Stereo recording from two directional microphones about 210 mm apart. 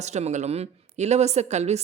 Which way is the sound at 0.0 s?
35° right (ahead or behind).